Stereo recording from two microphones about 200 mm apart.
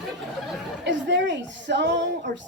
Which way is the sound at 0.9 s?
60° right (ahead or behind).